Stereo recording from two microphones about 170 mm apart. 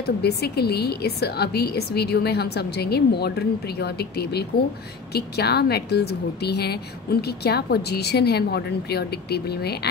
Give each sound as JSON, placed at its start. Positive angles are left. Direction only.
{"t": 0.0, "sound": "a woman's voice", "side_deg": 70}